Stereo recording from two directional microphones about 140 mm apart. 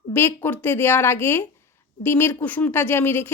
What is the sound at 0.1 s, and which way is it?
Speech, 15° left (ahead or behind).